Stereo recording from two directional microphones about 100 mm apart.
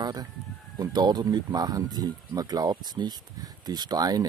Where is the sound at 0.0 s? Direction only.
45° right (ahead or behind).